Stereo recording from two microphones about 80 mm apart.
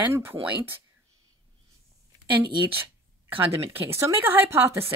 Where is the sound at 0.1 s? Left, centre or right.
Right.